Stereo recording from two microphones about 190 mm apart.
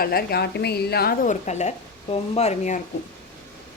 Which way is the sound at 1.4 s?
35° left (ahead or behind).